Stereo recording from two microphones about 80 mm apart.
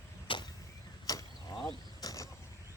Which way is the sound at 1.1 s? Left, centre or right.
Left.